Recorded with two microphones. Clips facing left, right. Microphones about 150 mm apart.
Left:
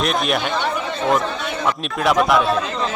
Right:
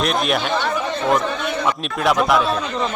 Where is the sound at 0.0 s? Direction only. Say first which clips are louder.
Even; centre (ahead or behind).